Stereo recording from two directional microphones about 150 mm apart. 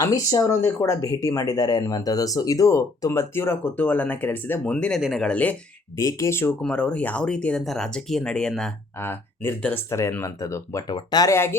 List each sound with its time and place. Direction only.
0.0 s speech: 25° left (ahead or behind)
6.0 s speech: 20° left (ahead or behind)
6.6 s speech: 5° left (ahead or behind)
9.0 s speech: 15° left (ahead or behind)